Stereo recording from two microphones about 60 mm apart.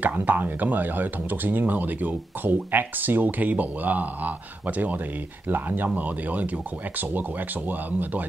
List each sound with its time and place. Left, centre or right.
0.0 s speech: right